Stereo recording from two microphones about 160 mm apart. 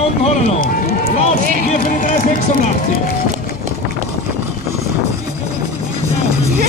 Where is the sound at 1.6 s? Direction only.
50° left (ahead or behind).